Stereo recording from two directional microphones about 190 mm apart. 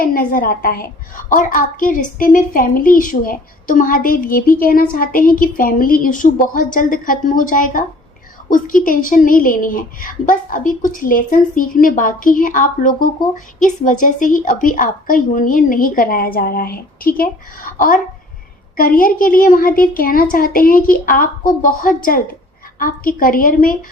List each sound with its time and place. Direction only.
0.0 s a woman's voice: 50° left (ahead or behind)